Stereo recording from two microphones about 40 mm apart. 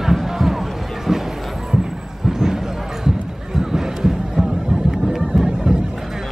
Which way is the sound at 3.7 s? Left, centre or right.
Centre.